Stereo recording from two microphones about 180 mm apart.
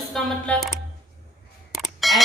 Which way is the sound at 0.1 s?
5° left (ahead or behind).